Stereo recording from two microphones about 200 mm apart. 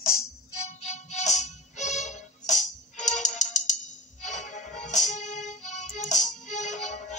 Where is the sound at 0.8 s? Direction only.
35° left (ahead or behind).